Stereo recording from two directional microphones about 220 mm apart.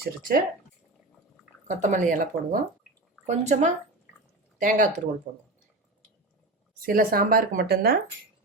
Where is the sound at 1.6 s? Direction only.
35° right (ahead or behind).